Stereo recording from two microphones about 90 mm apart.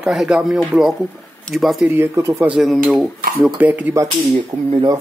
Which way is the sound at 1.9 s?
30° right (ahead or behind).